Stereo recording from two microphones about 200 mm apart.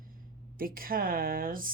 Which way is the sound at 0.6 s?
45° right (ahead or behind).